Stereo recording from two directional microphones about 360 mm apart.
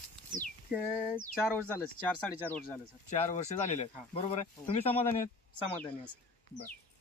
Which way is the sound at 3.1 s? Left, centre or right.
Centre.